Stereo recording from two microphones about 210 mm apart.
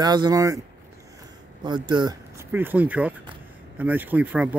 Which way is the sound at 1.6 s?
20° right (ahead or behind).